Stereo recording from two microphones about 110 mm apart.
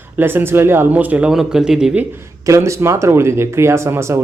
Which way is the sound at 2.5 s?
25° right (ahead or behind).